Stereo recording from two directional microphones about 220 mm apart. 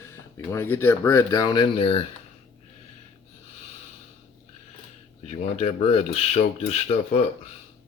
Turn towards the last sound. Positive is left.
turn(degrees=25)  # may be behind; listen again after turning